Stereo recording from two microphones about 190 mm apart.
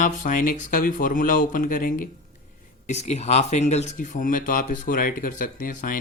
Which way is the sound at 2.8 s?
35° left (ahead or behind).